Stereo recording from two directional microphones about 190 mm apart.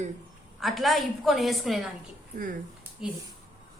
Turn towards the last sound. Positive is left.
turn(degrees=-5)  # may be behind; listen again after turning